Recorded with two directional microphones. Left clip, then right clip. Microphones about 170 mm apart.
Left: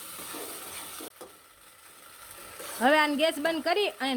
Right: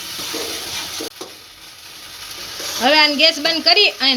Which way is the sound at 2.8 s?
40° left (ahead or behind).